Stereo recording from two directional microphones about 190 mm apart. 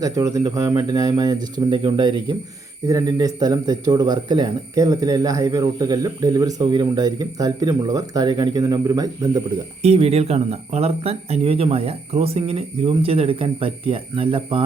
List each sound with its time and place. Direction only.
0.0 s speech: 15° right (ahead or behind)
9.8 s speech: 35° right (ahead or behind)